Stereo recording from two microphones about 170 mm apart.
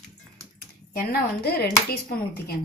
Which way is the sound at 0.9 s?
65° left (ahead or behind).